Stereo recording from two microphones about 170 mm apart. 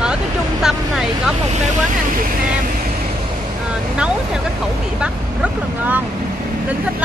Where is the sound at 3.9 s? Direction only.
5° right (ahead or behind).